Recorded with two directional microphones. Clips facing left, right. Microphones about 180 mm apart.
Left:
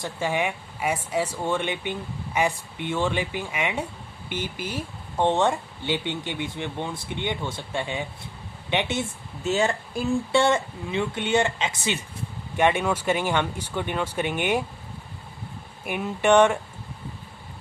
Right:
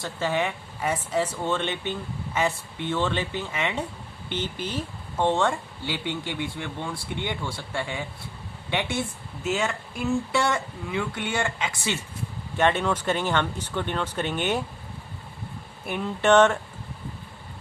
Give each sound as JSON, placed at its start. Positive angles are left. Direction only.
{"t": 0.0, "sound": "speech", "side_deg": 15}
{"t": 9.4, "sound": "speech", "side_deg": 30}
{"t": 15.9, "sound": "speech", "side_deg": 10}